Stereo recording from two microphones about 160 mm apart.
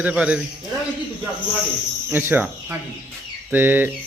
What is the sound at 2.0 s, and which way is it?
Speech, 10° right (ahead or behind).